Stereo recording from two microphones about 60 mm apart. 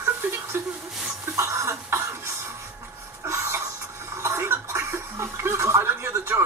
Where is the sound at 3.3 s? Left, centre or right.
Right.